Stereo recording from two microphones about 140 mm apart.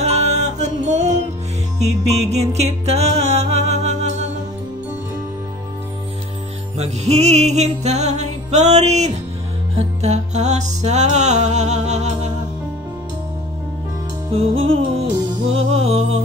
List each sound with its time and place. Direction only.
0.0 s music: 50° right (ahead or behind)
6.8 s music: 50° right (ahead or behind)
14.3 s music: 45° right (ahead or behind)